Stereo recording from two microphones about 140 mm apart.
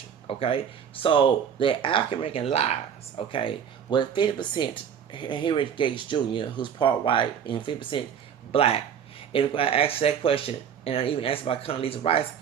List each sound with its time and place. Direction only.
0.3 s speech: 40° left (ahead or behind)
3.3 s speech: 35° left (ahead or behind)